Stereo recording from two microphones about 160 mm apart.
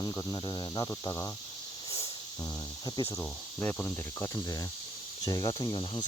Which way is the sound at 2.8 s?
25° left (ahead or behind).